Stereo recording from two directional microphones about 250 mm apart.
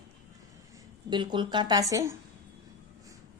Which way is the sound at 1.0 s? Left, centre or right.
Centre.